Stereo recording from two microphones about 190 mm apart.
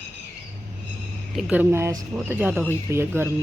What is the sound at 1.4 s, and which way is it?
Speech, 5° right (ahead or behind).